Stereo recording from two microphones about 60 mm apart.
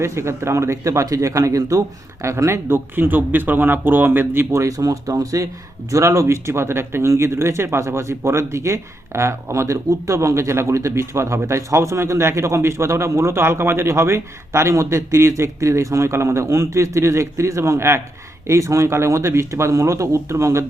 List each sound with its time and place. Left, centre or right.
0.0 s a man's voice: right
2.2 s speech: right
4.5 s speech: right
5.9 s speech: right
18.4 s speech: right